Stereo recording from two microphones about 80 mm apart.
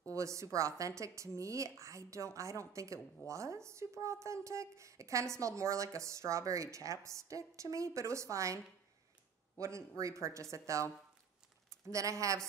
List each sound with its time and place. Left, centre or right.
0.1 s speech: right
9.6 s speech: right